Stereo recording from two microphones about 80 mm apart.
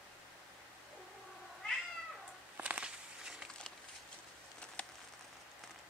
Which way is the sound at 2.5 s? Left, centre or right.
Centre.